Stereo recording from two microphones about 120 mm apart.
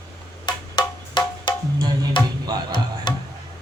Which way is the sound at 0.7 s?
40° left (ahead or behind).